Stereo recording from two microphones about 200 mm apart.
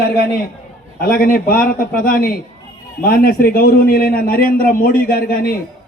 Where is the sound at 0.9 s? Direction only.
50° left (ahead or behind).